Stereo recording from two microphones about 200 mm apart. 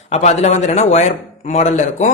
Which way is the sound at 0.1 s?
35° left (ahead or behind).